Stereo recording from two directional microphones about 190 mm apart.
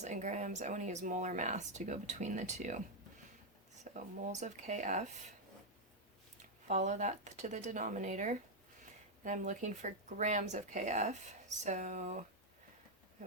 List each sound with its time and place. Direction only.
0.0 s speech: 40° right (ahead or behind)
3.9 s speech: 40° right (ahead or behind)
6.7 s speech: 40° right (ahead or behind)